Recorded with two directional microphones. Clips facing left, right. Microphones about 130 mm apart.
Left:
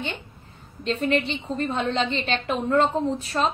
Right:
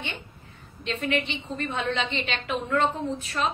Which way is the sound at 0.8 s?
40° left (ahead or behind).